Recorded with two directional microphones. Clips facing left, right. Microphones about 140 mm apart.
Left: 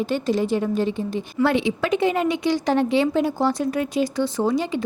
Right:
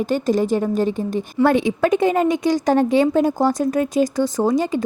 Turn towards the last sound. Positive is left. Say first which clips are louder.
# right 3 dB
turn(degrees=-45)  # may be behind; listen again after turning